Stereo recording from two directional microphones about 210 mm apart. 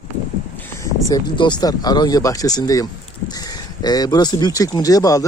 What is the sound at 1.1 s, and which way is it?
Speech, 20° left (ahead or behind).